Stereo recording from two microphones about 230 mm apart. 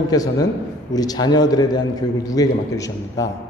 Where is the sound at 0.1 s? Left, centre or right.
Centre.